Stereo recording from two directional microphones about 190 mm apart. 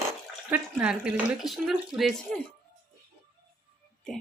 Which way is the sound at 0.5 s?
5° right (ahead or behind).